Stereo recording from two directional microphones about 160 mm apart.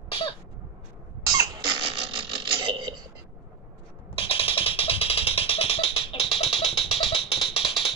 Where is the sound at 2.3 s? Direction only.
30° right (ahead or behind).